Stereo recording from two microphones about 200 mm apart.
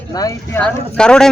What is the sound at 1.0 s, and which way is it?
Speech, 5° left (ahead or behind).